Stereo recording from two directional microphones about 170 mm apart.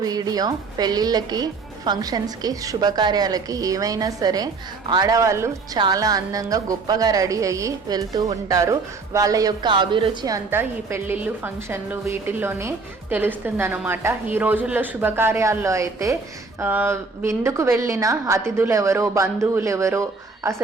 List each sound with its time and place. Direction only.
0.0 s a woman's voice: 20° right (ahead or behind)